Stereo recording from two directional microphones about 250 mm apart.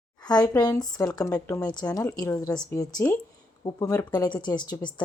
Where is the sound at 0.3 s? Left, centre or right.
Centre.